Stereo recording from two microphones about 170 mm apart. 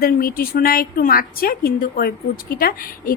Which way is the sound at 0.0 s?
60° left (ahead or behind).